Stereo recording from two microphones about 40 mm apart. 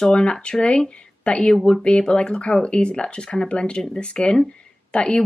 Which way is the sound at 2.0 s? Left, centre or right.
Left.